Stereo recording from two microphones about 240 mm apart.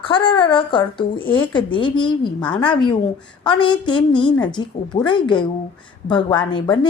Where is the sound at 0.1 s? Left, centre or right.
Left.